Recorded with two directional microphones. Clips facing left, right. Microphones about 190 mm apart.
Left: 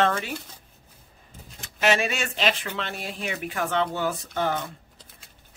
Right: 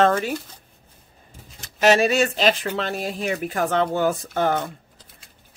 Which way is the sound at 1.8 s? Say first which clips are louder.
Right 7 dB; 40° right (ahead or behind).